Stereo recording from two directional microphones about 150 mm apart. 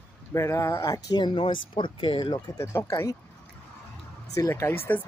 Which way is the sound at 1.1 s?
30° left (ahead or behind).